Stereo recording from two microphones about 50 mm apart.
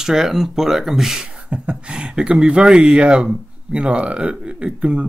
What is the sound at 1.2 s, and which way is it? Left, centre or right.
Speech, right.